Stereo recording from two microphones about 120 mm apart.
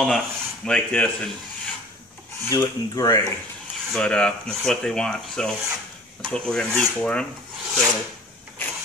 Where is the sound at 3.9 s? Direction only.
5° left (ahead or behind).